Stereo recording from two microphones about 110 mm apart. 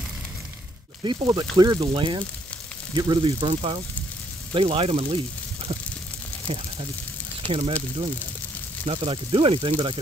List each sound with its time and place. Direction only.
1.0 s speech: 40° right (ahead or behind)
3.3 s speech: 55° right (ahead or behind)
6.4 s speech: 65° right (ahead or behind)
8.8 s speech: 60° right (ahead or behind)